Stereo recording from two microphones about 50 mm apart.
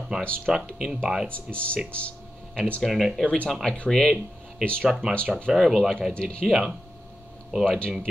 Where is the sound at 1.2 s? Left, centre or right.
Left.